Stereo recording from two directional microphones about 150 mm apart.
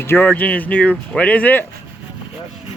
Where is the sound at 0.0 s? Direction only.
15° left (ahead or behind).